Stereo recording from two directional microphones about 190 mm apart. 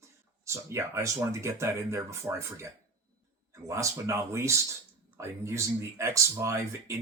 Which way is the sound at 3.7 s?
15° right (ahead or behind).